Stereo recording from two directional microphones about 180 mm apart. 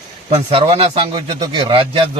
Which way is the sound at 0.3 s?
35° right (ahead or behind).